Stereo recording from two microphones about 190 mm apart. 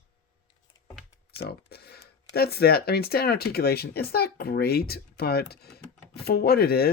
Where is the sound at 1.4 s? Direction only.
55° left (ahead or behind).